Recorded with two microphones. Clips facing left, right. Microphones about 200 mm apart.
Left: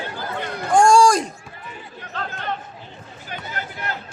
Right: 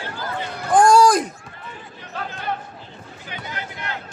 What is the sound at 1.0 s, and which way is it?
Run, 5° right (ahead or behind).